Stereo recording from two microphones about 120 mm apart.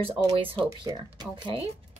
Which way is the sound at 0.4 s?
45° right (ahead or behind).